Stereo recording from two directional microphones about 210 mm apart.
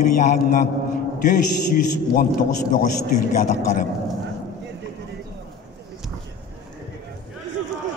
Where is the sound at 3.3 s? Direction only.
35° left (ahead or behind).